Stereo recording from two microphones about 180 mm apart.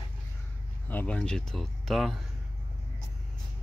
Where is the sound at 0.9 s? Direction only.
10° left (ahead or behind).